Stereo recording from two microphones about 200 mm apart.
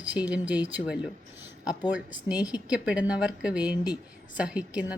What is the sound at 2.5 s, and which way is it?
Speech, 5° right (ahead or behind).